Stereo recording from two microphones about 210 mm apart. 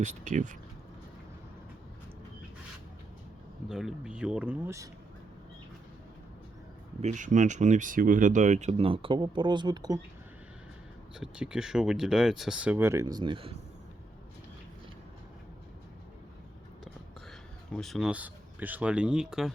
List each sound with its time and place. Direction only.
0.0 s speech: 35° right (ahead or behind)
3.7 s speech: centre (ahead or behind)
7.0 s speech: 35° right (ahead or behind); by 10.0 s 20° right (ahead or behind)
11.2 s speech: 5° right (ahead or behind); by 13.6 s 25° right (ahead or behind)
17.7 s speech: centre (ahead or behind)